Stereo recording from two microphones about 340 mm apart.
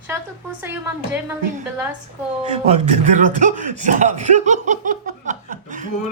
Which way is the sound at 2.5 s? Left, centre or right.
Centre.